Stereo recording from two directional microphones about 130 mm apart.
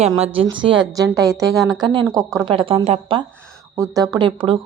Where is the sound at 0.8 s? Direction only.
30° right (ahead or behind).